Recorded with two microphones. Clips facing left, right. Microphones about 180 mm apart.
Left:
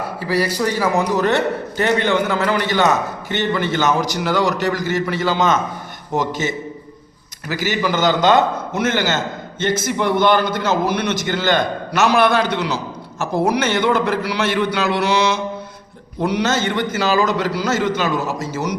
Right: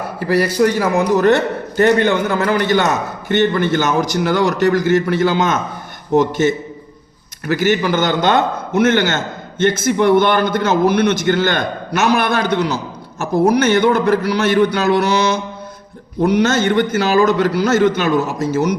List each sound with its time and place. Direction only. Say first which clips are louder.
0.2 s a man's voice: right 6 dB; 55° right (ahead or behind)